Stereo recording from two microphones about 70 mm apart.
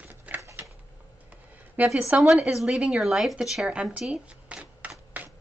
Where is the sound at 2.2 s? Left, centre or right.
Centre.